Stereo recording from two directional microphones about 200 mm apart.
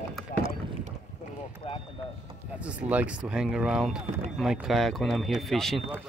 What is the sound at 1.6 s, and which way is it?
Run, 30° left (ahead or behind).